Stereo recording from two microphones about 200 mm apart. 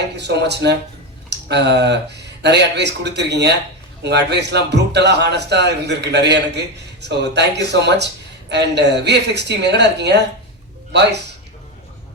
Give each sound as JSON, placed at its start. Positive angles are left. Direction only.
{"t": 0.2, "sound": "a man's voice", "side_deg": -60}